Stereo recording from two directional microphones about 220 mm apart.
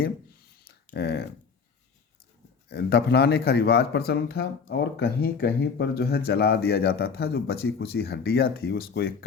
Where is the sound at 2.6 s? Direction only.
45° left (ahead or behind).